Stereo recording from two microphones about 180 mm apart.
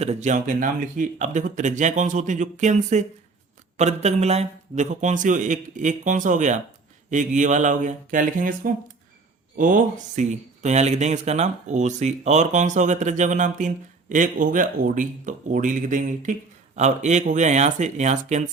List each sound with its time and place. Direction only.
0.0 s speech: 40° right (ahead or behind)